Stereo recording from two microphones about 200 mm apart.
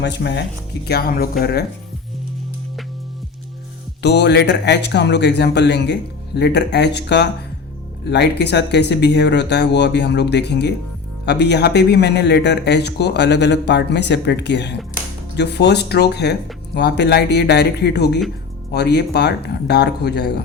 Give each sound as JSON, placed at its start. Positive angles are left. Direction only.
{"t": 0.0, "sound": "speech", "side_deg": 60}
{"t": 4.0, "sound": "speech", "side_deg": 60}